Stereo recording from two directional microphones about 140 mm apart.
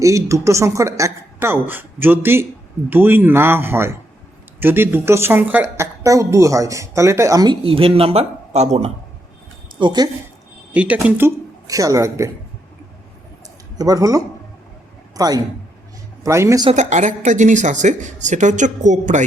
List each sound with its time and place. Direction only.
0.0 s a woman's voice: 20° right (ahead or behind)
7.6 s speech: 40° right (ahead or behind)
9.7 s a woman's voice: 30° right (ahead or behind)
10.7 s speech: 10° right (ahead or behind)
11.7 s a woman's voice: 25° right (ahead or behind)
13.7 s a woman's voice: 25° right (ahead or behind)
16.7 s speech: 60° right (ahead or behind)